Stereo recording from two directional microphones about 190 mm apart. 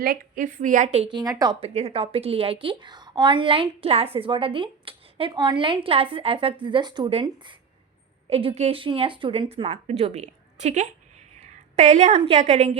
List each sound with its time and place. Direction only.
0.0 s a woman's voice: 50° right (ahead or behind)
1.1 s a woman's voice: 20° right (ahead or behind)
1.7 s a woman's voice: 30° right (ahead or behind)